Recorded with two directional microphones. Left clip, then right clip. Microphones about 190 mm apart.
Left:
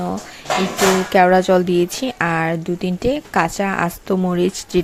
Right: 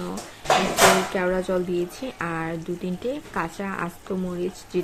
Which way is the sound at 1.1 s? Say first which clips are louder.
Left 12 dB; 50° left (ahead or behind).